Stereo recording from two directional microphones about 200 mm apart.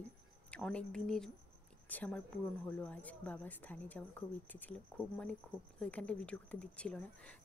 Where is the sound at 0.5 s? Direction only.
5° left (ahead or behind).